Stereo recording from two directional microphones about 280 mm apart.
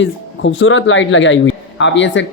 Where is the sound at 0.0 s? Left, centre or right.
Left.